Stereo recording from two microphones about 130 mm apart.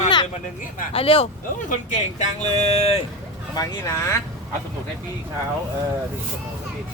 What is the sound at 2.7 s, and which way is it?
Speech, 55° left (ahead or behind).